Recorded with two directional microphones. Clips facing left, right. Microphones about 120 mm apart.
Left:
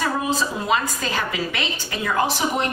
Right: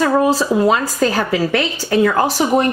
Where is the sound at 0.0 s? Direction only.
40° right (ahead or behind).